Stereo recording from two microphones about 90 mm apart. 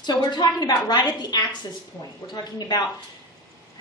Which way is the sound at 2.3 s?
50° left (ahead or behind).